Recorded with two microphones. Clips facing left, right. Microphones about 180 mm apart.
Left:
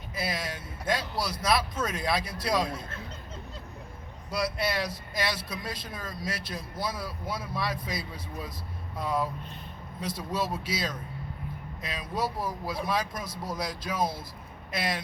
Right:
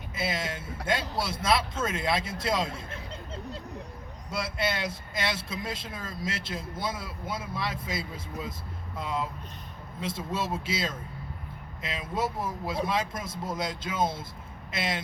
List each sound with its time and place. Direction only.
0.2 s speech: 25° right (ahead or behind)
4.3 s speech: 25° right (ahead or behind)
10.0 s speech: 25° right (ahead or behind)